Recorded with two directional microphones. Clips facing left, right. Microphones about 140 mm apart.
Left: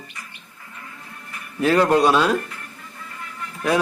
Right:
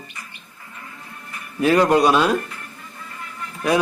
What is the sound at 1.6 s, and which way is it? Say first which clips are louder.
Speech: right 1 dB; 10° right (ahead or behind).